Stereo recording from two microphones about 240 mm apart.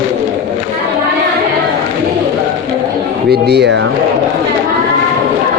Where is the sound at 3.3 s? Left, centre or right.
Right.